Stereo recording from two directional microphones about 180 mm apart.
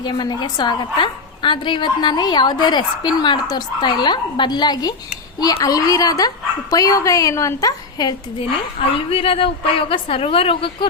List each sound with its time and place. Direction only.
0.0 s a woman's voice: 25° left (ahead or behind)